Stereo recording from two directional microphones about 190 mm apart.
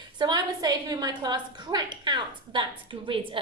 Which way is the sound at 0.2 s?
20° right (ahead or behind).